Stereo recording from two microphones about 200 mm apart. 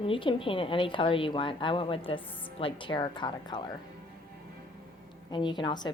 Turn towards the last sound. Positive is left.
turn(degrees=20)  # may be behind; listen again after turning